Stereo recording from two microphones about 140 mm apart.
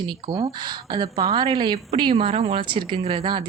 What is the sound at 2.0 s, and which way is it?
Speech, 45° right (ahead or behind).